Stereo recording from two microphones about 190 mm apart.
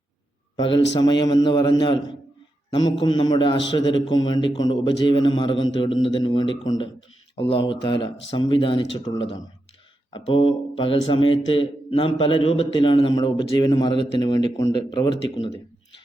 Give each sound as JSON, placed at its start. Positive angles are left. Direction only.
{"t": 0.5, "sound": "a man's voice", "side_deg": 25}